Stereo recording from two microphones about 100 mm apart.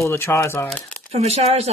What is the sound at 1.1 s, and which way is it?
Speech, 90° right.